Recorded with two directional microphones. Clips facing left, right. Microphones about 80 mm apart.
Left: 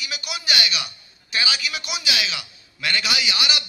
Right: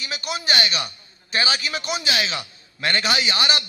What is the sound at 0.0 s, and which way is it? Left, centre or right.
A man's voice, right.